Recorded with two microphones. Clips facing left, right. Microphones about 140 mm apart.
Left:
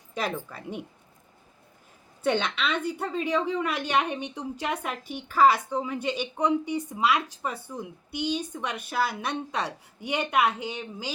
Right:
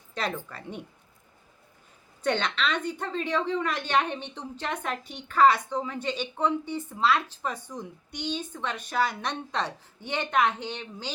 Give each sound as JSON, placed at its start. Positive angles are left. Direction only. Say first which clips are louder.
{"t": 0.1, "sound": "a woman's voice", "louder": "left 1 dB", "side_deg": 10}
{"t": 2.2, "sound": "a woman's voice", "louder": "left 1 dB", "side_deg": 10}